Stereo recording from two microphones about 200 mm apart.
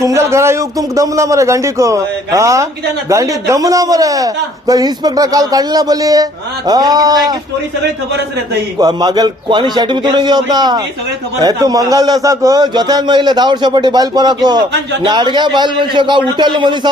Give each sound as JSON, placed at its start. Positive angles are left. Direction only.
{"t": 0.0, "sound": "a man's voice", "side_deg": -15}
{"t": 8.8, "sound": "a man's voice", "side_deg": -20}